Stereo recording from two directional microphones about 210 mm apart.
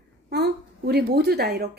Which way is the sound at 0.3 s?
50° right (ahead or behind).